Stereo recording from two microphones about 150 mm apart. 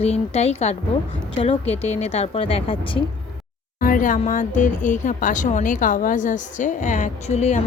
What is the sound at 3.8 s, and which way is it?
Speech, 65° left (ahead or behind).